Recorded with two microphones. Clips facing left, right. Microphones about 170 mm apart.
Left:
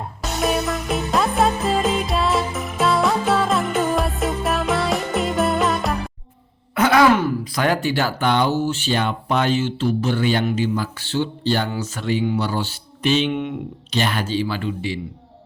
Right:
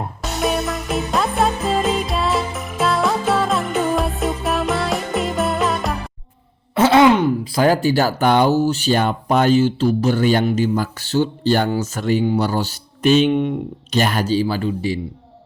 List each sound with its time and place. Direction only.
0.2 s music: centre (ahead or behind)
6.7 s sigh: 25° right (ahead or behind)
7.5 s speech: 35° right (ahead or behind)